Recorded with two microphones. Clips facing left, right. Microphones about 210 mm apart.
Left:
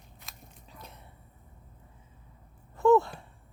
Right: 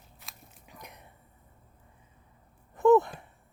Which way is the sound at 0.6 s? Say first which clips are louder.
Right 1 dB; 15° right (ahead or behind).